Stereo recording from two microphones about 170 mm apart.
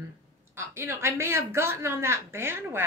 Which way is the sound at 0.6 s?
15° right (ahead or behind).